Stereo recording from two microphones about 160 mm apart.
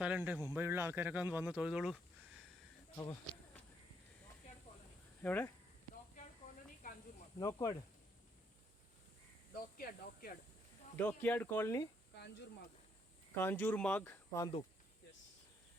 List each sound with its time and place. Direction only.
0.0 s speech: 10° right (ahead or behind)
2.9 s speech: 20° left (ahead or behind)
5.2 s speech: 10° left (ahead or behind)
6.8 s snake: 60° left (ahead or behind)
7.3 s speech: 25° left (ahead or behind)
9.7 s speech: 70° left (ahead or behind)
11.2 s speech: 10° left (ahead or behind)
12.1 s a sound: 90° left
13.3 s speech: 10° left (ahead or behind)